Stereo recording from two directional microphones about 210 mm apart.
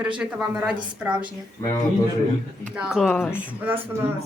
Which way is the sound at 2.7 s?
5° right (ahead or behind).